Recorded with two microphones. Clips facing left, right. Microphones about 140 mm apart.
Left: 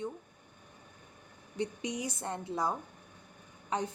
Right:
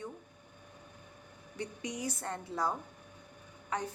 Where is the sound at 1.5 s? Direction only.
20° left (ahead or behind).